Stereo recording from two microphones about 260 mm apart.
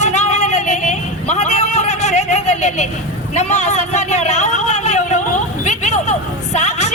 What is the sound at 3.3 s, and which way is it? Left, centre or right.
Speech, left.